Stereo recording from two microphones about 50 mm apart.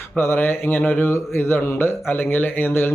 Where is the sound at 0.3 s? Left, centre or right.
Left.